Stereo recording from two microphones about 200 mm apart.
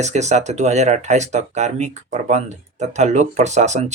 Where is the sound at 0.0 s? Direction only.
35° right (ahead or behind).